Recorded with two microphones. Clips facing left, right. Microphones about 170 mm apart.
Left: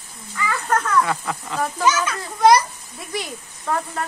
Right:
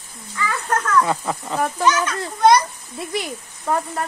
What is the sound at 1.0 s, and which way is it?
Speech, 25° right (ahead or behind).